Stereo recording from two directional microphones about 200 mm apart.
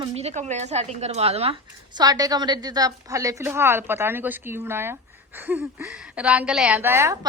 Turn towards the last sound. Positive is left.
turn(degrees=-10)  # may be behind; listen again after turning